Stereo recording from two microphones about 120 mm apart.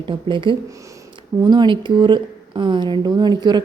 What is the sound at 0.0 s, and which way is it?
Speech, 45° right (ahead or behind).